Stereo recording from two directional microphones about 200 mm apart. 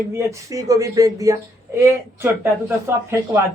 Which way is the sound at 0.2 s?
15° right (ahead or behind).